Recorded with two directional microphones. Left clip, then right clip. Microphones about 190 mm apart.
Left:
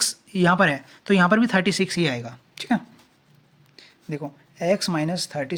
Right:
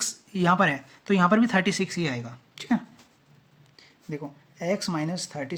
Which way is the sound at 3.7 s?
35° left (ahead or behind).